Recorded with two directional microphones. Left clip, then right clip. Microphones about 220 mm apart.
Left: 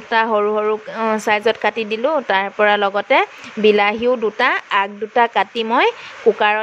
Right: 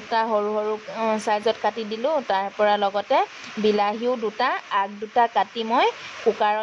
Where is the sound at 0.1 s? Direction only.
25° left (ahead or behind).